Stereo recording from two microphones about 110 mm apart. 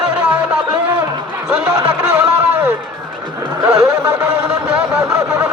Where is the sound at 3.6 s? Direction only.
30° right (ahead or behind).